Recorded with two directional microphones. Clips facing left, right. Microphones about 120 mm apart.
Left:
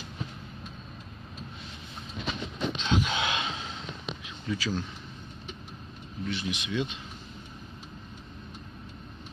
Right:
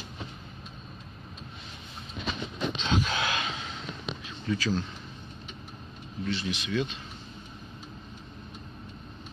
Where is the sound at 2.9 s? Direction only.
20° left (ahead or behind).